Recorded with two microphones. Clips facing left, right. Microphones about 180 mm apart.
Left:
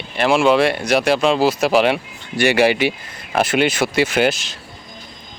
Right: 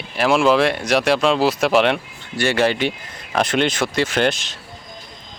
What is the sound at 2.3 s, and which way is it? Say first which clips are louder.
Speech: left 3 dB; 15° left (ahead or behind).